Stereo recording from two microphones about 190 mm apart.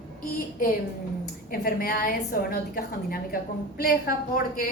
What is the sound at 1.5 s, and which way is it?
A woman's voice, 50° left (ahead or behind).